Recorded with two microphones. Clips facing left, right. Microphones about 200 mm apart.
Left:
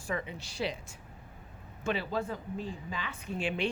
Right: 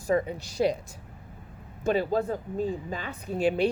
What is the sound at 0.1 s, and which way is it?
Speech, 40° right (ahead or behind).